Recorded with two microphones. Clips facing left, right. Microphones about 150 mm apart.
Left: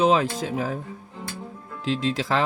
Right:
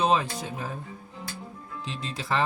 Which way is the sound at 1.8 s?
90° left.